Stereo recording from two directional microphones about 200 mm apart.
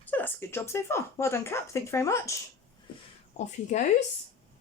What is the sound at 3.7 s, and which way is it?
Speech, 35° left (ahead or behind).